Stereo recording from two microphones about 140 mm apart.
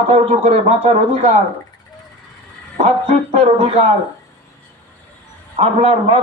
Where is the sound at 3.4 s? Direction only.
45° right (ahead or behind).